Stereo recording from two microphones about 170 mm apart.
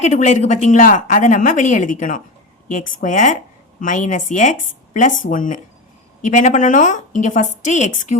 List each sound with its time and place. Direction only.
0.0 s a woman's voice: 45° left (ahead or behind)